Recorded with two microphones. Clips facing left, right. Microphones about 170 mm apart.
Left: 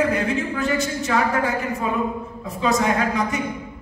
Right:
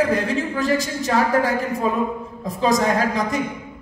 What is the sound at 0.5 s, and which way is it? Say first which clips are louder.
Speech: right 2 dB; 35° right (ahead or behind).